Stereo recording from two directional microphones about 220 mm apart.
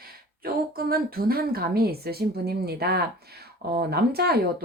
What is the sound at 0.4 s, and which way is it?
Speech, 45° right (ahead or behind).